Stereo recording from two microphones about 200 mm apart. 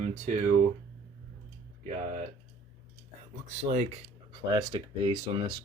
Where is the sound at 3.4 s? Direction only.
35° right (ahead or behind).